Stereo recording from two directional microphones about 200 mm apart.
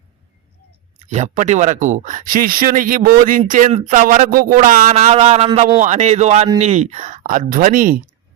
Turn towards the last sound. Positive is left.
turn(degrees=-45)  # may be behind; listen again after turning